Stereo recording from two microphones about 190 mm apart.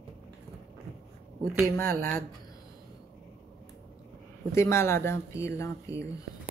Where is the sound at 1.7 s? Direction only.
10° left (ahead or behind).